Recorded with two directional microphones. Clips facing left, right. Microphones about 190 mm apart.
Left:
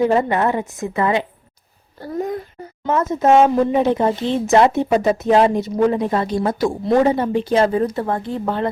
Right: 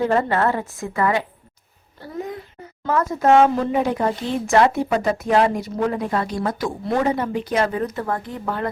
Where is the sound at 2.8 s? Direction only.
20° left (ahead or behind).